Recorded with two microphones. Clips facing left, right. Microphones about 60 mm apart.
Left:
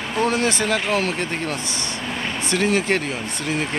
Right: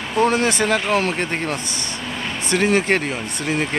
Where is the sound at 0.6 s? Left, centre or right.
Right.